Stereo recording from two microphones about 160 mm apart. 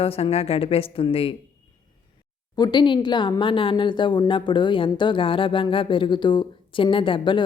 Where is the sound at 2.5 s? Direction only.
25° left (ahead or behind).